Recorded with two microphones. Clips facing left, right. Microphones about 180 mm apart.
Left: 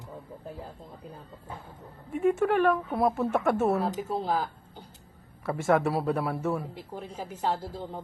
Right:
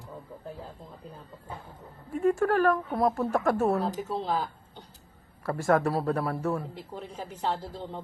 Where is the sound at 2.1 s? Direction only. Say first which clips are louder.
Even; 5° left (ahead or behind).